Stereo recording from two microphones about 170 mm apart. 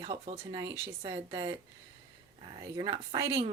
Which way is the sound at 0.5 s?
20° right (ahead or behind).